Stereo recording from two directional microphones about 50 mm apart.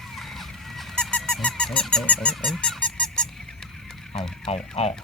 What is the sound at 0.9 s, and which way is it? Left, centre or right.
Squeak, centre.